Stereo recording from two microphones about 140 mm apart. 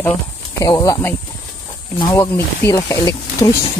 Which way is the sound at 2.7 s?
25° left (ahead or behind).